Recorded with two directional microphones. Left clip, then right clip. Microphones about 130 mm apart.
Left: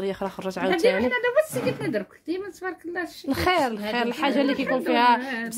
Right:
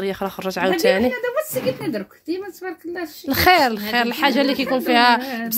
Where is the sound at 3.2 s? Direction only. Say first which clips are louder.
Right 8 dB; 10° right (ahead or behind).